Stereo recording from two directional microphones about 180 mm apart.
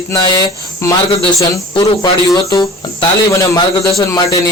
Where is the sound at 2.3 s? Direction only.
20° left (ahead or behind).